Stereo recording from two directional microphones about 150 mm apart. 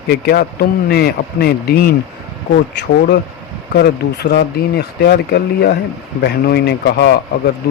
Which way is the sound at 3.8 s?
90° left.